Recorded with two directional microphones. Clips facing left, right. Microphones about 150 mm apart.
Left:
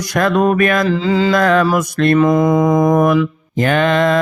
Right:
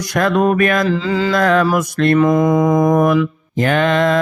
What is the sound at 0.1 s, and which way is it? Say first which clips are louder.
Speech: left 1 dB; 45° left (ahead or behind).